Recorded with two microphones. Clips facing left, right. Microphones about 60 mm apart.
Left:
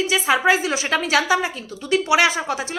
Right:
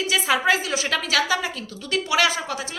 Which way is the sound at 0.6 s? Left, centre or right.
Left.